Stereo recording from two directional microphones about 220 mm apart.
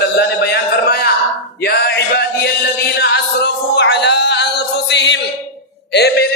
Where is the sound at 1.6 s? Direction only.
50° left (ahead or behind).